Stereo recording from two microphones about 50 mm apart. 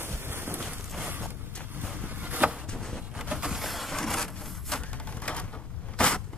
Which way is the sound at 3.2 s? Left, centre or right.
Centre.